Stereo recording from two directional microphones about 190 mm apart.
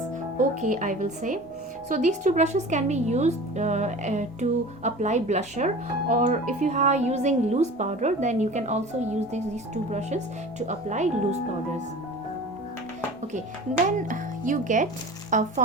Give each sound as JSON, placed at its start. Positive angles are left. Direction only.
{"t": 0.3, "sound": "speech", "side_deg": -40}
{"t": 10.7, "sound": "speech", "side_deg": -40}
{"t": 14.1, "sound": "speech", "side_deg": -45}